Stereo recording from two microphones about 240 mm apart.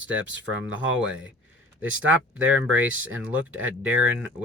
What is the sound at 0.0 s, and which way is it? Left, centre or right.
Speech, right.